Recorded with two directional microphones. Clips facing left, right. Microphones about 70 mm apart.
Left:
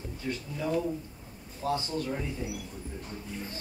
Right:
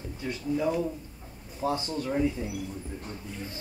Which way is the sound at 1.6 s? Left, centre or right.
Right.